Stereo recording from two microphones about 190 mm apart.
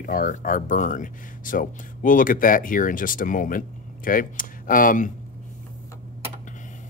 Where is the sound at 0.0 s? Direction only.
45° left (ahead or behind).